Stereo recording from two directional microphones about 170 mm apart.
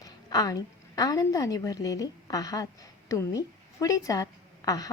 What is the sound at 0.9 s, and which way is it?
A woman's voice, 20° left (ahead or behind).